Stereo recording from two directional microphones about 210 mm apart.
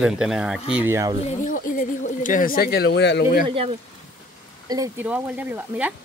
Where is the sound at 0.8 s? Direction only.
15° right (ahead or behind).